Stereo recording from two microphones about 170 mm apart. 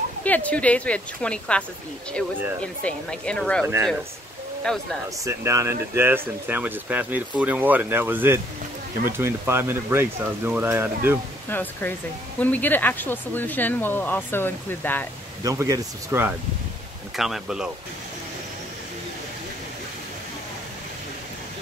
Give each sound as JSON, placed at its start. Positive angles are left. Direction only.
{"t": 0.2, "sound": "speech", "side_deg": 10}
{"t": 2.6, "sound": "speech", "side_deg": 5}
{"t": 4.7, "sound": "speech", "side_deg": 0}
{"t": 5.2, "sound": "speech", "side_deg": -15}
{"t": 11.4, "sound": "speech", "side_deg": 10}
{"t": 15.4, "sound": "speech", "side_deg": -20}
{"t": 17.2, "sound": "speech", "side_deg": 0}